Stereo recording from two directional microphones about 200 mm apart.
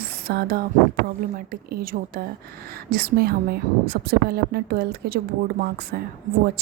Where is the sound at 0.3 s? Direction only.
50° right (ahead or behind).